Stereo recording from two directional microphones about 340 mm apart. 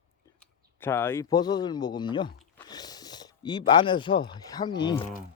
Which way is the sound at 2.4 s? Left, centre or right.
Centre.